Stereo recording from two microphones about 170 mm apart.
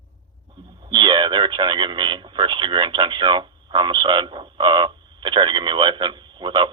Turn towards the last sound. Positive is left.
turn(degrees=-30)  # may be behind; listen again after turning